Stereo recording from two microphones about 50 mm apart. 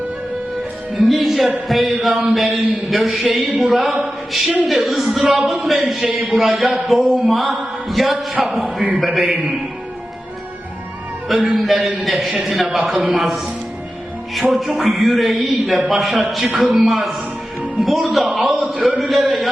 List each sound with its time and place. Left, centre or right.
0.9 s mantra: centre
3.9 s a capella: centre
4.6 s mantra: centre
5.0 s speech: centre
5.5 s mantra: centre
5.9 s speech: centre
6.2 s mantra: centre
8.6 s a man's voice: right
9.0 s mantra: centre
11.5 s mantra: centre
14.5 s mantra: centre
18.3 s a sound: centre